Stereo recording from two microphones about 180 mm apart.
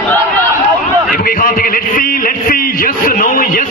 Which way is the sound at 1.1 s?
50° left (ahead or behind).